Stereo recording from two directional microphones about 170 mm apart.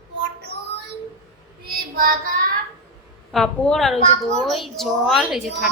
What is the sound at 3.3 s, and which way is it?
A woman's voice, 5° left (ahead or behind).